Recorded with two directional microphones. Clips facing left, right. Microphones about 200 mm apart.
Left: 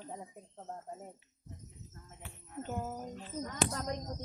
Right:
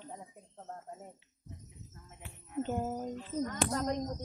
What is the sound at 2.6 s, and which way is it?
Jingle bell, 25° right (ahead or behind).